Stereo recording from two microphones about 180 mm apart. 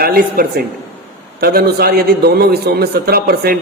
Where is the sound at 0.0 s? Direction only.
60° right (ahead or behind).